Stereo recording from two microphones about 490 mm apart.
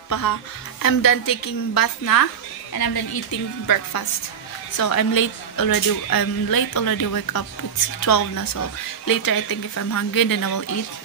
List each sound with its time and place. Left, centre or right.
0.1 s a woman's voice: left